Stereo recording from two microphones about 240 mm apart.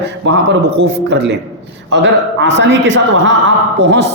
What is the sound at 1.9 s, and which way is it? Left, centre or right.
A man's voice, right.